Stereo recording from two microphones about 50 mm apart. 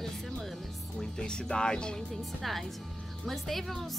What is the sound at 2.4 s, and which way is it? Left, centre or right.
A woman's voice, centre.